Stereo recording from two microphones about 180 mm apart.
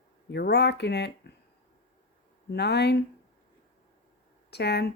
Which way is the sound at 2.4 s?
65° left (ahead or behind).